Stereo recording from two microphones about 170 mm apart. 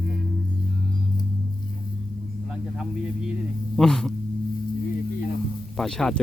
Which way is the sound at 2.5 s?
5° right (ahead or behind).